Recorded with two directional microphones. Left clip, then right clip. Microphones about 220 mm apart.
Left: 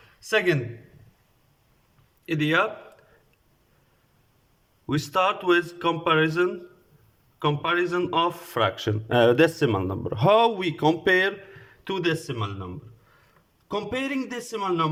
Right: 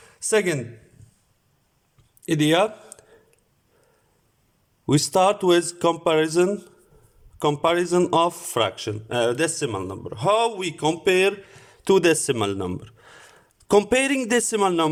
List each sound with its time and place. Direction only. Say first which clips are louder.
0.2 s a man's voice: right 1 dB; 30° right (ahead or behind)
2.2 s speech: right 3 dB; 25° right (ahead or behind)
4.9 s a man's voice: right 5 dB; 25° right (ahead or behind); by 14.8 s 40° right (ahead or behind)